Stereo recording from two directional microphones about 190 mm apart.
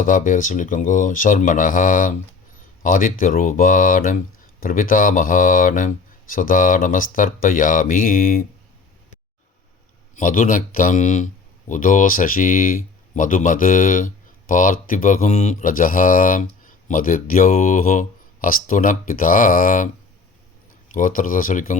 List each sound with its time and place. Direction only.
0.0 s speech: 45° left (ahead or behind)
10.2 s speech: 45° left (ahead or behind)
20.9 s speech: 45° left (ahead or behind)